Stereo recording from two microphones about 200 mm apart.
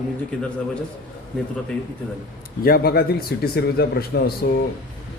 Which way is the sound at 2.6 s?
50° left (ahead or behind).